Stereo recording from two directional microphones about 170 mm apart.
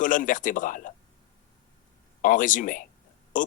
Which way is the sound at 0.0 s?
50° left (ahead or behind).